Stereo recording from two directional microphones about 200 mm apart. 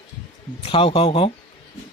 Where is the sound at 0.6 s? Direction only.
25° left (ahead or behind).